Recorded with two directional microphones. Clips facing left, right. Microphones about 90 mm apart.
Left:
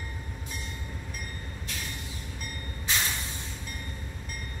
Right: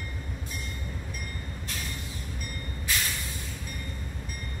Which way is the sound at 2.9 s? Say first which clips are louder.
Left 1 dB; 25° left (ahead or behind).